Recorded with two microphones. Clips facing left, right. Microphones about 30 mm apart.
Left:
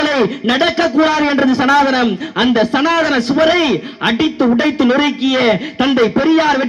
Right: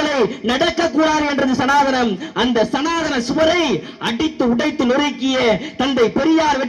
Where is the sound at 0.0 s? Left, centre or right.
Left.